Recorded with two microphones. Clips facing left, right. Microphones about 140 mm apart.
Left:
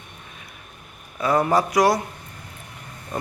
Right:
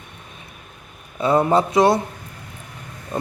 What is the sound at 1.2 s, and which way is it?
Speech, 25° right (ahead or behind).